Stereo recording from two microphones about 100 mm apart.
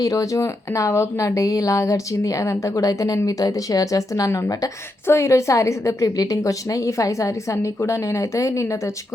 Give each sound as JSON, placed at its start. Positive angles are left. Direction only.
{"t": 0.0, "sound": "speech", "side_deg": 35}